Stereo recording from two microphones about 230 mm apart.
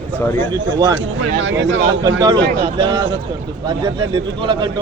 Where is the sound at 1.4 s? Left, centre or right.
Right.